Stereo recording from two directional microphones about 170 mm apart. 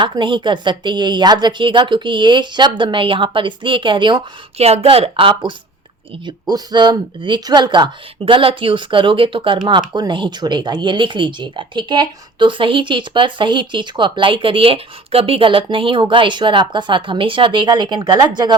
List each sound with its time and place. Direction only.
0.0 s speech: 30° right (ahead or behind)